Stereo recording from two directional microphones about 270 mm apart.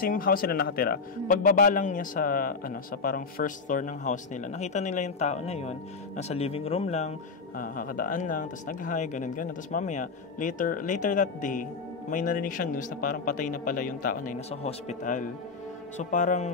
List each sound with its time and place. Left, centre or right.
0.0 s speech: left